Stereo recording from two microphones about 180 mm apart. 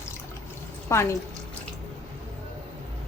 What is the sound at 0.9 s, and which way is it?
Speech, 15° left (ahead or behind).